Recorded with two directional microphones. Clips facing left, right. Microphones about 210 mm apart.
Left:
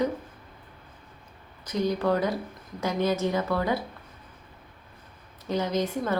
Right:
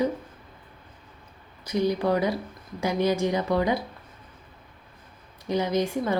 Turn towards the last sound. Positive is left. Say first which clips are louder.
# right 2 dB
turn(degrees=-10)  # may be behind; listen again after turning